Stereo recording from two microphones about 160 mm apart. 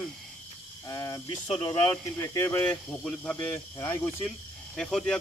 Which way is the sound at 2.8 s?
5° left (ahead or behind).